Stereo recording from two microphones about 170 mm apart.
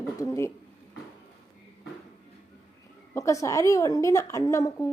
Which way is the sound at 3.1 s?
20° left (ahead or behind).